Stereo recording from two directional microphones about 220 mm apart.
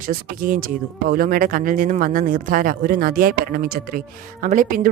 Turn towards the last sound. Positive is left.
turn(degrees=-40)  # may be behind; listen again after turning